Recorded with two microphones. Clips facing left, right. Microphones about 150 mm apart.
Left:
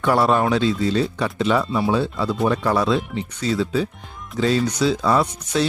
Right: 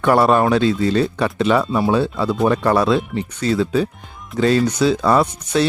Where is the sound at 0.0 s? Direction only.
60° right (ahead or behind).